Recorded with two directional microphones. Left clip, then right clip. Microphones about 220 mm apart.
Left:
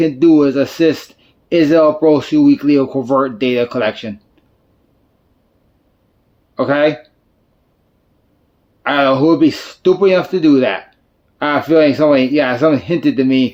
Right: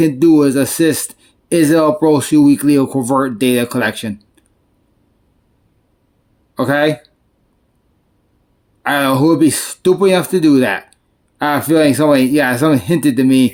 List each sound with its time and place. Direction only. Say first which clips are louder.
0.0 s speech: even; 50° right (ahead or behind)
6.6 s speech: left 1 dB; 50° right (ahead or behind)
8.8 s speech: left 1 dB; 55° right (ahead or behind)